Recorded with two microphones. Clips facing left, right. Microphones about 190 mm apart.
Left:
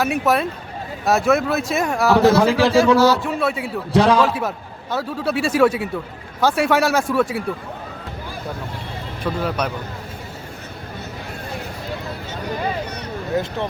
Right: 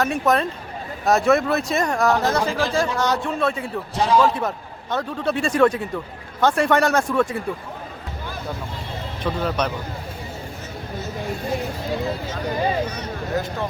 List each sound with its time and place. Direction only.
0.0 s speech: 5° left (ahead or behind)
2.4 s speech: 75° left (ahead or behind)
3.0 s speech: 5° left (ahead or behind)
3.9 s speech: 75° left (ahead or behind)
4.4 s speech: 5° left (ahead or behind)
9.2 s speech: 5° left (ahead or behind)